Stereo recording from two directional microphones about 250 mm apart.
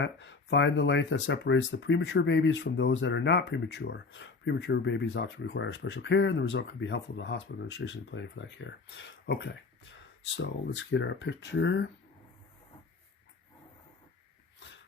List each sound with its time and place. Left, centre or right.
0.0 s speech: left